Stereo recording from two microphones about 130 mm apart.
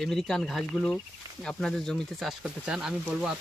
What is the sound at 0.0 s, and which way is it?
Speech, centre (ahead or behind).